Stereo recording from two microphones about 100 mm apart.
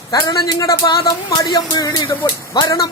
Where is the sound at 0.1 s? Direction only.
35° left (ahead or behind).